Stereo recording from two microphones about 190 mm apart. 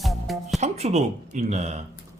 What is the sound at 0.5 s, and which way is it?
Speech, 35° right (ahead or behind).